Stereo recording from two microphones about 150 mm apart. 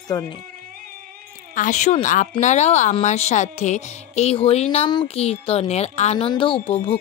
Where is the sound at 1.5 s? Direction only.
55° left (ahead or behind).